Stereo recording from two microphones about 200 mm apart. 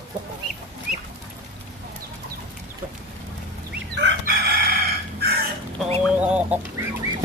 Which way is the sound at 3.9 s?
55° right (ahead or behind).